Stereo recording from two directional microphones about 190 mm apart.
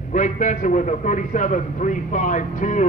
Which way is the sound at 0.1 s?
40° left (ahead or behind).